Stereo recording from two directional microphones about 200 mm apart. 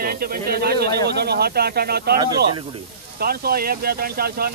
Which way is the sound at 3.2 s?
50° right (ahead or behind).